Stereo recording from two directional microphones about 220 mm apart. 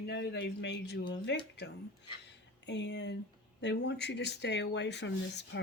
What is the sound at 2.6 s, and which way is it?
Speech, 50° left (ahead or behind).